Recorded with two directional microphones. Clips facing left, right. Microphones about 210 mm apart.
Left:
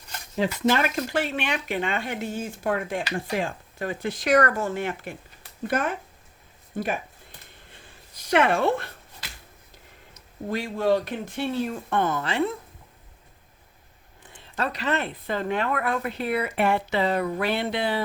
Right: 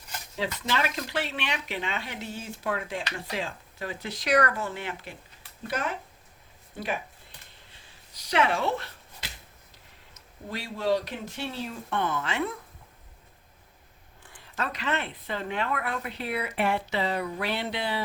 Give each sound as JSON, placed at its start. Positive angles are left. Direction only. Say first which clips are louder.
{"t": 0.3, "sound": "speech", "louder": "left 7 dB", "side_deg": 50}
{"t": 7.7, "sound": "a sound", "louder": "left 5 dB", "side_deg": 50}
{"t": 10.5, "sound": "speech", "louder": "left 4 dB", "side_deg": 50}
{"t": 14.3, "sound": "speech", "louder": "left 4 dB", "side_deg": 25}